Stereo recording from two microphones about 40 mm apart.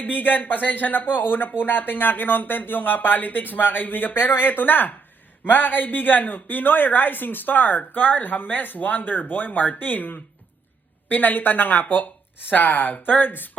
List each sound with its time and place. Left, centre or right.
0.0 s speech: left